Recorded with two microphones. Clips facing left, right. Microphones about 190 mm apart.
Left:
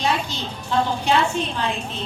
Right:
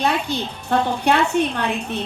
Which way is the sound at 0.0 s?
60° right (ahead or behind).